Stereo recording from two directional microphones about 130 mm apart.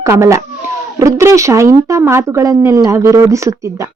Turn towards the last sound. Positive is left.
turn(degrees=-25)  # may be behind; listen again after turning